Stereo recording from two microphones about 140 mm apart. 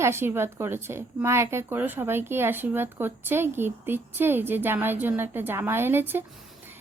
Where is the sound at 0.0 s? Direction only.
15° right (ahead or behind).